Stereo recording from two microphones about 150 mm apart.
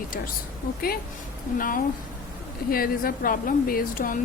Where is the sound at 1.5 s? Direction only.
65° left (ahead or behind).